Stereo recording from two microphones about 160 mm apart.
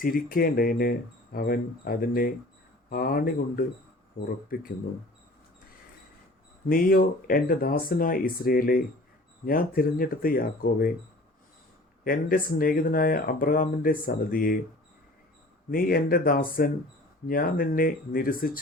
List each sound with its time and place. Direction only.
0.0 s speech: 65° left (ahead or behind)
6.7 s speech: 65° left (ahead or behind)
12.0 s speech: 60° left (ahead or behind)
15.7 s speech: 70° left (ahead or behind)